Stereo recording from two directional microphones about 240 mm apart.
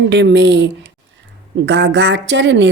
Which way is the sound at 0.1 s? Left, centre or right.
Right.